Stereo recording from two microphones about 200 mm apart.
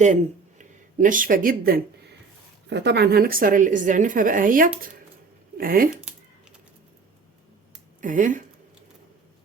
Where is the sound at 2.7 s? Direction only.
60° right (ahead or behind).